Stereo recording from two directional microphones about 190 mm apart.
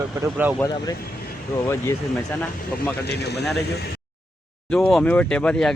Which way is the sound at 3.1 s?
60° left (ahead or behind).